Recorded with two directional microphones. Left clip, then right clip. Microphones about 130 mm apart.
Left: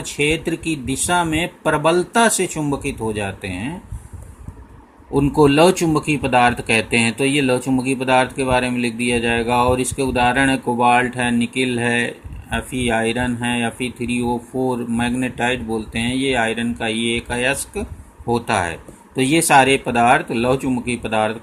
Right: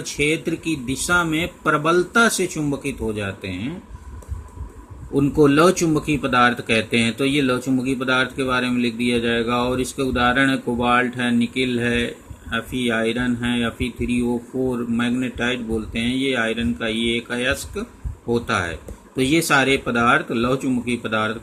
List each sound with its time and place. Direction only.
0.0 s speech: 25° left (ahead or behind)
5.1 s speech: 30° left (ahead or behind)